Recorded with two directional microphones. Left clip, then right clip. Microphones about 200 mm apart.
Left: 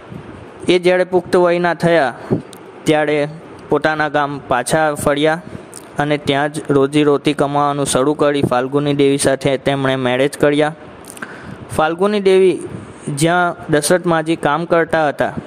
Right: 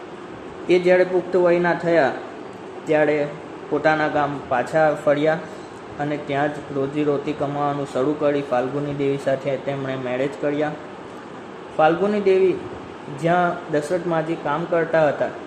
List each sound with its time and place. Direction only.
0.7 s a man's voice: 55° left (ahead or behind)
11.8 s speech: 55° left (ahead or behind)